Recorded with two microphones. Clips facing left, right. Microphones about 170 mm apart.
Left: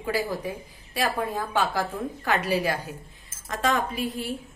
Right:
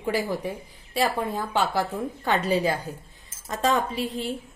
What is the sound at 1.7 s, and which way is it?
Speech, 10° right (ahead or behind).